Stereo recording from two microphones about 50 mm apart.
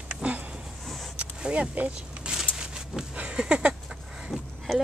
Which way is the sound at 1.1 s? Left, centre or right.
Centre.